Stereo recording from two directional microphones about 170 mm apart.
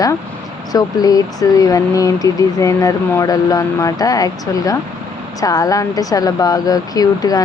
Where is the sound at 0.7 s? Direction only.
20° left (ahead or behind).